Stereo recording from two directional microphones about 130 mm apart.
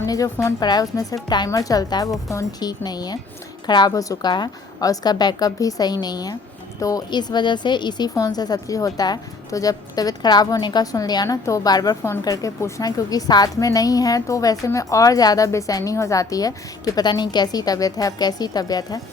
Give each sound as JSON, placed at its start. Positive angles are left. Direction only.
{"t": 0.0, "sound": "a woman's voice", "side_deg": 25}